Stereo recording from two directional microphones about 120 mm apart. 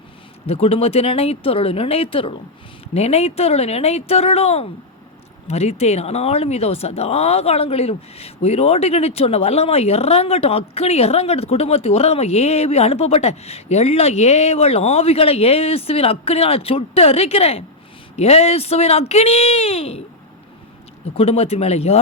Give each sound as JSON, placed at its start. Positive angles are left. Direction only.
{"t": 0.4, "sound": "speech", "side_deg": 55}
{"t": 2.9, "sound": "speech", "side_deg": 60}
{"t": 21.2, "sound": "speech", "side_deg": 55}